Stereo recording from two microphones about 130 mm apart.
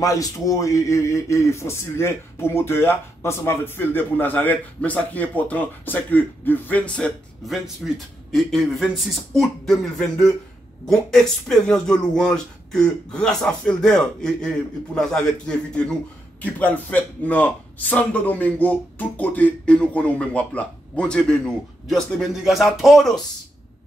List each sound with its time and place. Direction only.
0.0 s speech: 25° left (ahead or behind); by 23.1 s centre (ahead or behind)